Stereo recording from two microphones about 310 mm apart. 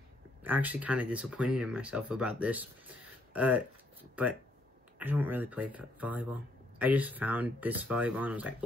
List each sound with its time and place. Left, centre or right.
0.4 s speech: centre